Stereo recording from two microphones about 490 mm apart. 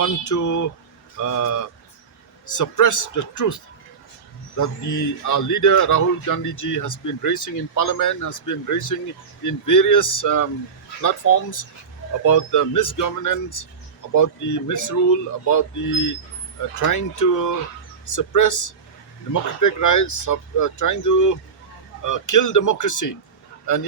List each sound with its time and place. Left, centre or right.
0.0 s speech: left
16.8 s speech: left